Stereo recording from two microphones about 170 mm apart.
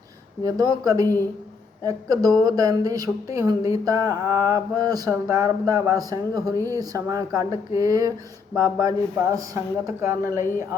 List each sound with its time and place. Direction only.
0.4 s speech: 20° right (ahead or behind)
1.0 s a woman's voice: 15° left (ahead or behind)
1.8 s speech: 20° right (ahead or behind)